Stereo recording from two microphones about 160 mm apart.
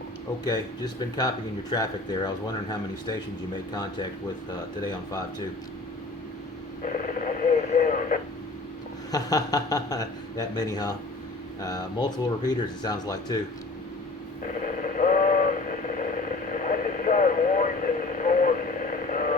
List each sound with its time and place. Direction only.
0.4 s speech: 25° left (ahead or behind)
6.8 s radio: 55° left (ahead or behind)
9.1 s speech: 25° left (ahead or behind)
14.4 s radio: 55° left (ahead or behind)